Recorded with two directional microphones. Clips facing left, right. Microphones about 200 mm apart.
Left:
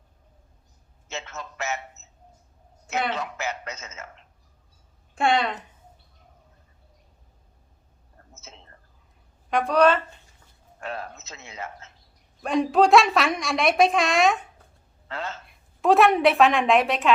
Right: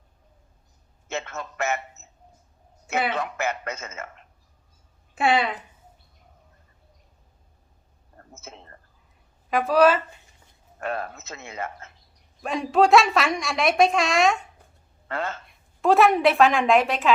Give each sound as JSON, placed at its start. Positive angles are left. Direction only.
{"t": 1.0, "sound": "a sound", "side_deg": -55}
{"t": 3.1, "sound": "a sound", "side_deg": -55}
{"t": 5.1, "sound": "a woman's voice", "side_deg": -5}
{"t": 8.3, "sound": "whispering", "side_deg": -55}
{"t": 9.5, "sound": "a woman's voice", "side_deg": -5}
{"t": 10.8, "sound": "a sound", "side_deg": -55}
{"t": 12.4, "sound": "a woman's voice", "side_deg": 0}
{"t": 15.0, "sound": "speech", "side_deg": -55}
{"t": 15.4, "sound": "a woman's voice", "side_deg": 0}